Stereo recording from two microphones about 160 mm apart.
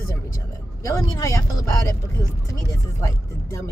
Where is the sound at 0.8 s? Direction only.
20° left (ahead or behind).